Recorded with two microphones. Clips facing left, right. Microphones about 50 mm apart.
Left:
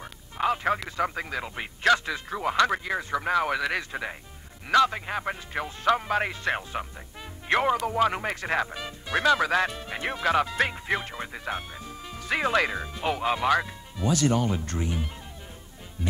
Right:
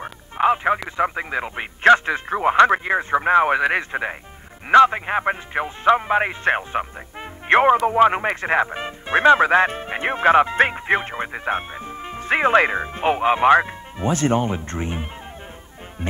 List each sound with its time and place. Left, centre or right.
0.0 s radio: right
0.8 s speech: right